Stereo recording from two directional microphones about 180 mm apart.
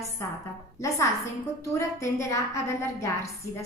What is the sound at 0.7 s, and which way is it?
A woman's voice, 15° left (ahead or behind).